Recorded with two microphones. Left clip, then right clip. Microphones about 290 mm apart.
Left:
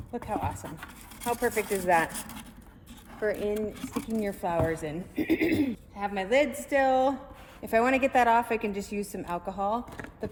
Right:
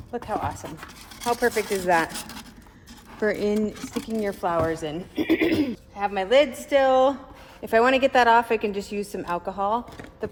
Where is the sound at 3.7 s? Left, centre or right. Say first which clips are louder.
Right 3 dB; centre.